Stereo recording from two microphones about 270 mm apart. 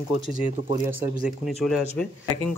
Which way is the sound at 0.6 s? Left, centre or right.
Centre.